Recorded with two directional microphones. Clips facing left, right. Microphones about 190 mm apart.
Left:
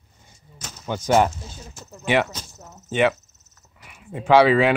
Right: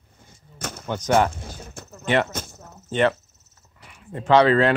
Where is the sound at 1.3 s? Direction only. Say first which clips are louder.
Right 2 dB; 55° right (ahead or behind).